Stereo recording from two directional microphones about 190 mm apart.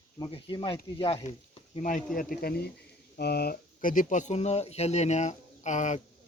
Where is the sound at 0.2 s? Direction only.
25° left (ahead or behind).